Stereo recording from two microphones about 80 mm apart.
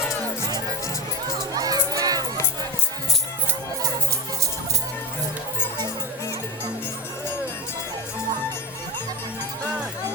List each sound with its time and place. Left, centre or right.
1.5 s crowd: right